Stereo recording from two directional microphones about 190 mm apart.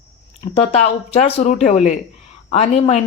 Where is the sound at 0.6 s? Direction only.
35° left (ahead or behind).